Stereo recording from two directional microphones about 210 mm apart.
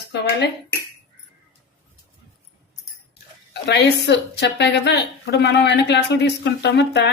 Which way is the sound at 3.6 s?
55° left (ahead or behind).